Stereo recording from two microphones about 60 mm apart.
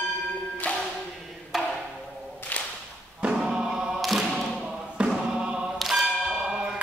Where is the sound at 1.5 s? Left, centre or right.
Centre.